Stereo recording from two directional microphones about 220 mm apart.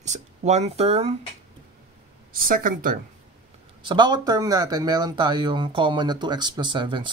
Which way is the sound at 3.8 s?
20° right (ahead or behind).